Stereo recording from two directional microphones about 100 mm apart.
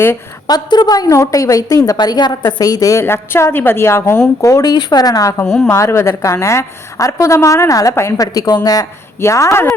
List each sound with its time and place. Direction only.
0.4 s a woman's voice: 45° left (ahead or behind)
5.6 s a woman's voice: 30° left (ahead or behind)
9.2 s speech: 30° left (ahead or behind)